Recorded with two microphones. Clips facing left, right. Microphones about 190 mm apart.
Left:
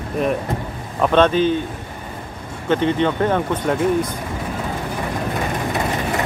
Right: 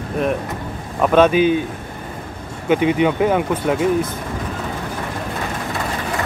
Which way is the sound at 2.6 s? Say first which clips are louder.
Right 2 dB; 10° right (ahead or behind).